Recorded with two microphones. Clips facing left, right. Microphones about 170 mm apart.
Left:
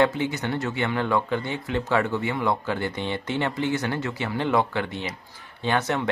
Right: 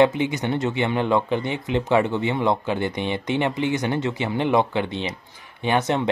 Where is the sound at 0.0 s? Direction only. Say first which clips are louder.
Right 4 dB; 20° right (ahead or behind).